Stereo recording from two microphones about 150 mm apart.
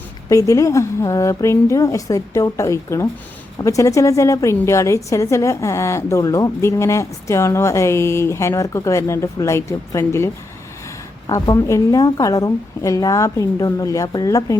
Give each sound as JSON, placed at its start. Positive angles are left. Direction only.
{"t": 0.3, "sound": "a woman's voice", "side_deg": 20}